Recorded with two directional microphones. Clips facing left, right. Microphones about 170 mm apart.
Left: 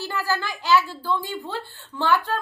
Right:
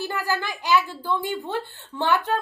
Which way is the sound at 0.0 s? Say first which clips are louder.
Even; 20° right (ahead or behind).